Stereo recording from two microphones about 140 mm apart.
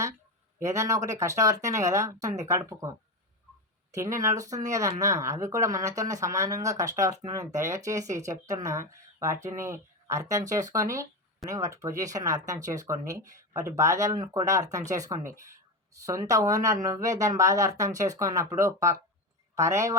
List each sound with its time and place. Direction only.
0.6 s speech: 20° right (ahead or behind)
3.9 s speech: 20° right (ahead or behind)